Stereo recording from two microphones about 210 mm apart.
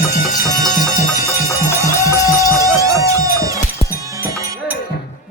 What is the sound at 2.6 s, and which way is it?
Music, 15° right (ahead or behind).